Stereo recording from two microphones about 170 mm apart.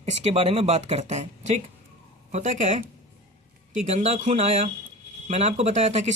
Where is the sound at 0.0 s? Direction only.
40° right (ahead or behind).